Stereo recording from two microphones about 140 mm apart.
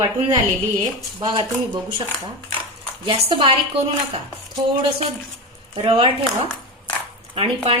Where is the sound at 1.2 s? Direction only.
35° right (ahead or behind).